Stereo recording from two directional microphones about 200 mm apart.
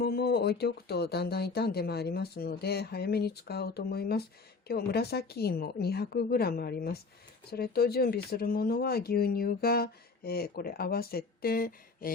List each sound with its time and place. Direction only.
0.0 s speech: 55° left (ahead or behind)